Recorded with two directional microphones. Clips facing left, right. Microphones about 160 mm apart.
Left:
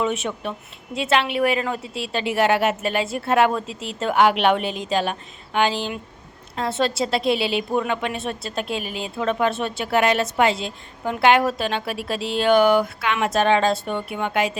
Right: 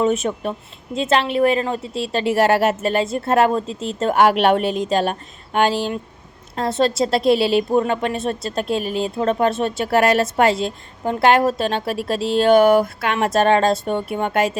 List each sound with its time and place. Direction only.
0.0 s speech: 40° right (ahead or behind)
6.6 s speech: 35° right (ahead or behind)